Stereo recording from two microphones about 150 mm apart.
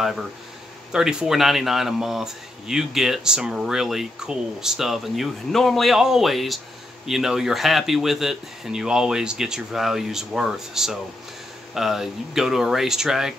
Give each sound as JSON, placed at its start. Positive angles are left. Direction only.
{"t": 0.9, "sound": "speech", "side_deg": -5}